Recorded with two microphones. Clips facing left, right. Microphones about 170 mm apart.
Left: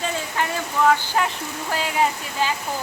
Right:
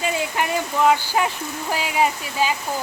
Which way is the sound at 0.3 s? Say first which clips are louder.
Left 1 dB; 15° right (ahead or behind).